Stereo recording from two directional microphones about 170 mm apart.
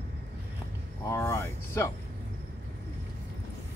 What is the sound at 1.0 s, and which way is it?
Speech, 15° left (ahead or behind).